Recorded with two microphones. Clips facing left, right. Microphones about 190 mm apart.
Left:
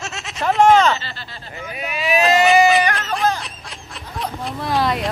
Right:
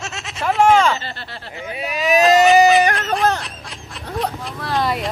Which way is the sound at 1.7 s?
35° right (ahead or behind).